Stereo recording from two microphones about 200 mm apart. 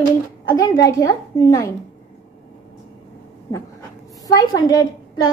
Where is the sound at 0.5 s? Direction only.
20° left (ahead or behind).